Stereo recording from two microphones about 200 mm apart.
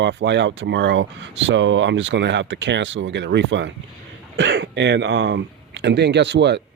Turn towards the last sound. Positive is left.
turn(degrees=-60)  # may be behind; listen again after turning